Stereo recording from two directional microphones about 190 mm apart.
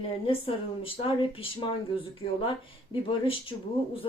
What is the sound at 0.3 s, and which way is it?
Speech, 30° left (ahead or behind).